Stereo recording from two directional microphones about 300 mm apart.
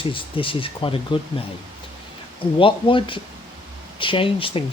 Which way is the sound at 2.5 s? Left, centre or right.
Centre.